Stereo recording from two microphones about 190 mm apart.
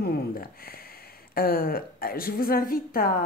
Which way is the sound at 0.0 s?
50° left (ahead or behind).